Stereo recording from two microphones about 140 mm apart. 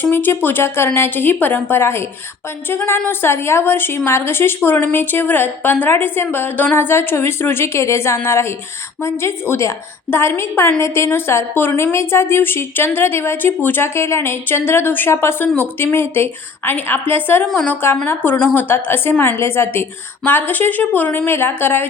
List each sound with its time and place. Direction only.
0.0 s a woman's voice: 15° left (ahead or behind)